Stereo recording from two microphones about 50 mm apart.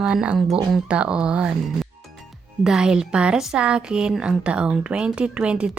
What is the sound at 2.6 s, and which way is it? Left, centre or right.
A woman's voice, centre.